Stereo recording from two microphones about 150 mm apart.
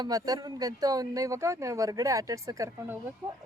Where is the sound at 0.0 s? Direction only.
25° right (ahead or behind).